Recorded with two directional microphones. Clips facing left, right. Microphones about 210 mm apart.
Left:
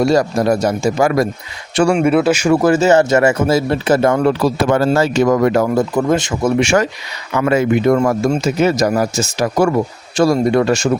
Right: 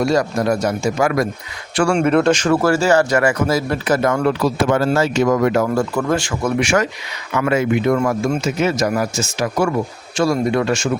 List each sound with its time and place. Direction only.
0.0 s a man's voice: 35° left (ahead or behind)
1.9 s speech: 5° left (ahead or behind); by 5.6 s 35° left (ahead or behind)
5.7 s a man's voice: 20° left (ahead or behind); by 10.8 s 40° left (ahead or behind)